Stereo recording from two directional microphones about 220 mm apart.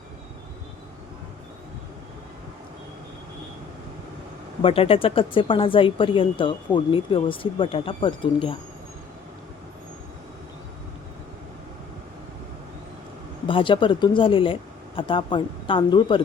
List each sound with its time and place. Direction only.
4.6 s speech: 25° left (ahead or behind)
13.5 s speech: 25° left (ahead or behind)